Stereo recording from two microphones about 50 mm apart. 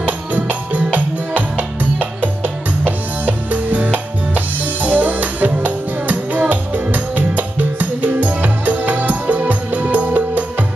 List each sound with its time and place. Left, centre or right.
0.0 s music: right
2.0 s music: right